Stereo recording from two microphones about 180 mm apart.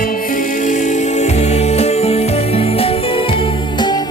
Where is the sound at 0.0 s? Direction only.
50° left (ahead or behind).